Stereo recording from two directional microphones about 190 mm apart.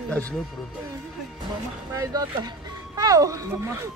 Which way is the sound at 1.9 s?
20° right (ahead or behind).